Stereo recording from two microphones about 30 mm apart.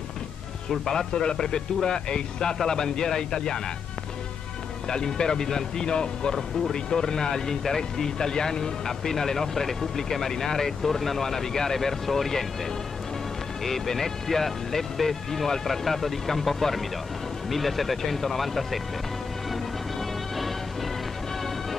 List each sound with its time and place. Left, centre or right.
0.7 s speech: centre
4.8 s speech: left
13.7 s speech: centre
19.5 s music: centre